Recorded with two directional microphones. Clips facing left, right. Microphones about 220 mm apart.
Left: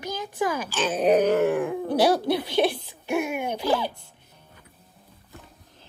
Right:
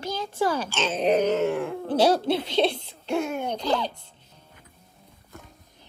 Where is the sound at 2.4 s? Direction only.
20° right (ahead or behind).